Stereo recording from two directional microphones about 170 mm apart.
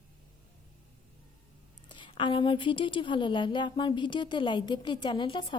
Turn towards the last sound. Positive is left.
turn(degrees=30)  # may be behind; listen again after turning